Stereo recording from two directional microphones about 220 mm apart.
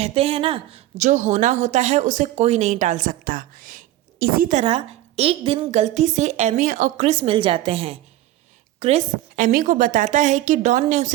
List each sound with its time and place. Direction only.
0.0 s speech: 25° right (ahead or behind)